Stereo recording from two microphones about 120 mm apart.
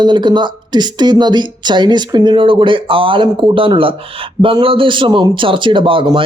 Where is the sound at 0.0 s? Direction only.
40° right (ahead or behind).